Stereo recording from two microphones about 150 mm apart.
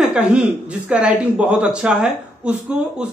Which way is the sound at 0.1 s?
5° right (ahead or behind).